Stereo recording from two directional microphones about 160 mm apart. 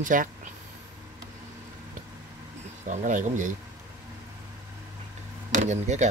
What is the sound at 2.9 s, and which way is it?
Speech, 50° right (ahead or behind).